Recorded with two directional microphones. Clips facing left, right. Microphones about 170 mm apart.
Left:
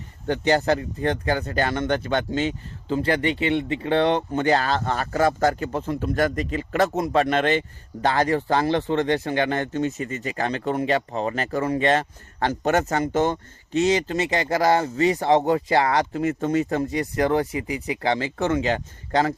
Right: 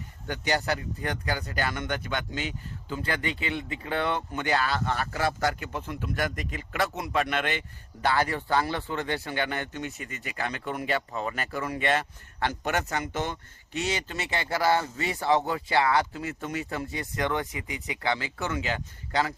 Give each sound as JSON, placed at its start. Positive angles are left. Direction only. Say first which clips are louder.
{"t": 0.3, "sound": "speech", "louder": "left 8 dB", "side_deg": 35}
{"t": 2.5, "sound": "speech", "louder": "left 9 dB", "side_deg": 30}